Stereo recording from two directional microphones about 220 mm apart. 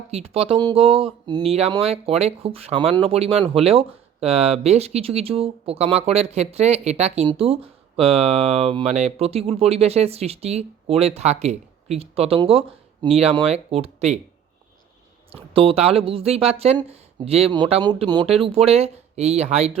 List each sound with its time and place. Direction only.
0.1 s speech: 25° right (ahead or behind)
15.3 s speech: 25° right (ahead or behind)